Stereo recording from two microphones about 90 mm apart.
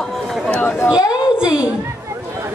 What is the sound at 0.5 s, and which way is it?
Speech, 20° left (ahead or behind).